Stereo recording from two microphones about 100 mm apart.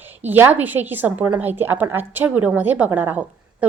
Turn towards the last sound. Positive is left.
turn(degrees=-15)  # may be behind; listen again after turning